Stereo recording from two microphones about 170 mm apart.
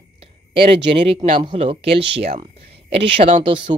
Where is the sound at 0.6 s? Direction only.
35° right (ahead or behind).